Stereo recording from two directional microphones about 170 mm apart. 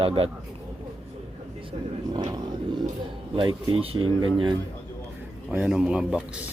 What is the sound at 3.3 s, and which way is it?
Speech, 30° right (ahead or behind).